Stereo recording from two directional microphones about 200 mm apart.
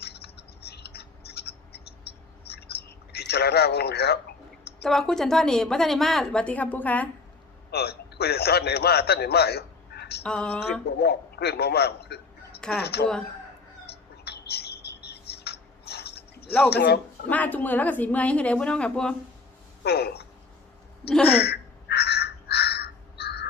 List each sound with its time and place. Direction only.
0.0 s rodents: 55° left (ahead or behind)
2.1 s a sound: 55° left (ahead or behind)
4.8 s a woman's voice: centre (ahead or behind)
7.7 s a man's voice: 55° left (ahead or behind)
10.2 s a woman's voice: 5° left (ahead or behind)
10.8 s a man's voice: 55° left (ahead or behind)
14.3 s a sound: 55° left (ahead or behind)
16.6 s speech: 55° left (ahead or behind)
17.2 s speech: 10° left (ahead or behind)
19.8 s speech: 55° left (ahead or behind)
21.3 s crow: 55° left (ahead or behind)